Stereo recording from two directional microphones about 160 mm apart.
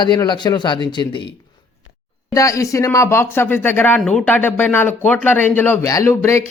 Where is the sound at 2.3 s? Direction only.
20° left (ahead or behind).